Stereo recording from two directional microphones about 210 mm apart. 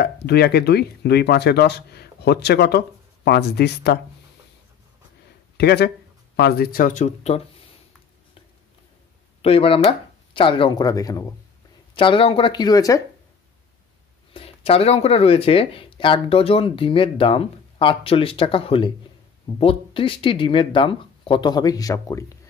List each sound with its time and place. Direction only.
0.0 s speech: 50° left (ahead or behind)
5.6 s speech: 50° left (ahead or behind); by 7.4 s 35° left (ahead or behind)
9.4 s speech: 25° left (ahead or behind)
14.3 s speech: 25° left (ahead or behind)